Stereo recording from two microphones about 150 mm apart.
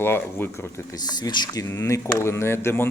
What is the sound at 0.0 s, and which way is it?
Speech, 15° left (ahead or behind).